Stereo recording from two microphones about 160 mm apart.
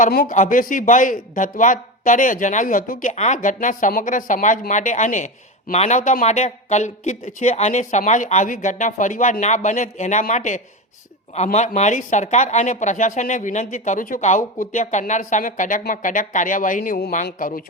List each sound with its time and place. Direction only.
0.0 s a man's voice: 60° left (ahead or behind)